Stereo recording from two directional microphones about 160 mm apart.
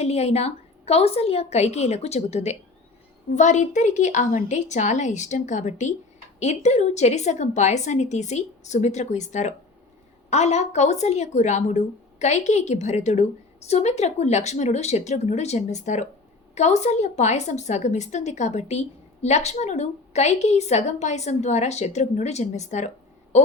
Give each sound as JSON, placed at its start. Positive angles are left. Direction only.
{"t": 0.0, "sound": "a woman's voice", "side_deg": 40}